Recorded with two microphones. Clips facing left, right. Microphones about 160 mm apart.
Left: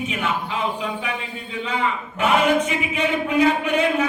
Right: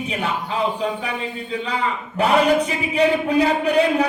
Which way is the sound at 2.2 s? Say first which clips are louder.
Right 2 dB; 35° right (ahead or behind).